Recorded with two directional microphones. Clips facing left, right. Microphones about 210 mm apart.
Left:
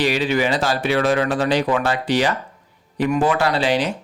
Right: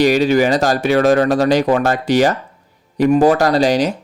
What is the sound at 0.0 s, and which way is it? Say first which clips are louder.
Speech: right 7 dB; 45° right (ahead or behind).